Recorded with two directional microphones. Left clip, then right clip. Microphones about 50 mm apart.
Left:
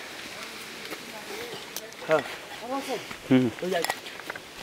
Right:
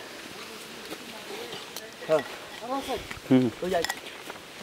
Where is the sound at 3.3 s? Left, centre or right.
Right.